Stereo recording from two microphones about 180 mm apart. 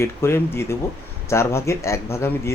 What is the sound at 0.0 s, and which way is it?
A man's voice, 15° left (ahead or behind).